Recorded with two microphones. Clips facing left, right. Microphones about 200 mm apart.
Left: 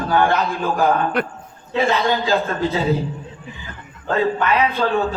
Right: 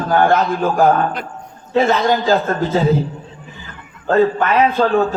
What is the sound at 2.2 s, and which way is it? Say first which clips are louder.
Speech: right 3 dB; 45° right (ahead or behind).